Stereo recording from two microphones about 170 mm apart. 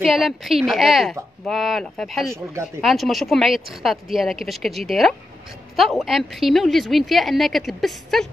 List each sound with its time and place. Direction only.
0.0 s a woman's voice: centre (ahead or behind)
2.3 s speech: 15° right (ahead or behind)
2.8 s a woman's voice: centre (ahead or behind)